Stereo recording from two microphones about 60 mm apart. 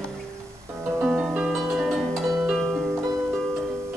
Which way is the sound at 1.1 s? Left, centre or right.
Centre.